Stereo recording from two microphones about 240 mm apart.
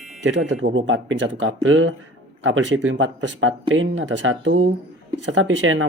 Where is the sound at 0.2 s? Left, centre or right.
Right.